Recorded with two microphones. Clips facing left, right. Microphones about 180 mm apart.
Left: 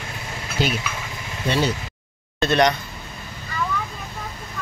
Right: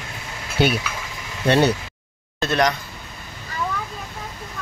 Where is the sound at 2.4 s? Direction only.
Centre (ahead or behind).